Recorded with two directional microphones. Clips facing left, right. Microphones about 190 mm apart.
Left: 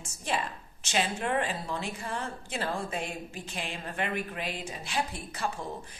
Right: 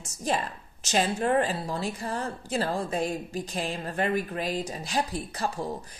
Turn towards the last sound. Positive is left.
turn(degrees=-35)  # may be behind; listen again after turning